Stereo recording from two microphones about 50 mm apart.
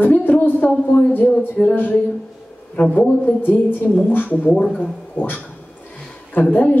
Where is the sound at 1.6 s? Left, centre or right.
Centre.